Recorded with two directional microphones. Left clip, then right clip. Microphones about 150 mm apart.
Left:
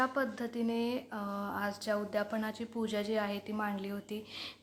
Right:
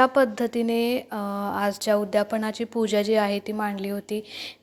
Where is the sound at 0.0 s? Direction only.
45° right (ahead or behind).